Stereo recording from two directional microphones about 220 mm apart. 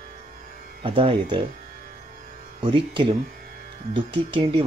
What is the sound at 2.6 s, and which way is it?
Speech, 20° right (ahead or behind).